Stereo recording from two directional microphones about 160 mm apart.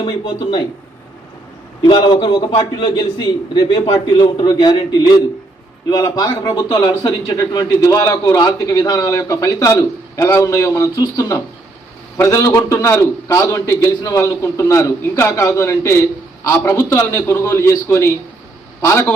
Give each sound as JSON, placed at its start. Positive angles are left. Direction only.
{"t": 0.0, "sound": "a man's voice", "side_deg": 30}
{"t": 1.8, "sound": "a man's voice", "side_deg": 25}